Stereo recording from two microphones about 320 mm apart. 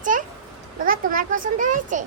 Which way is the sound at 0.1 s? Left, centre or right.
Right.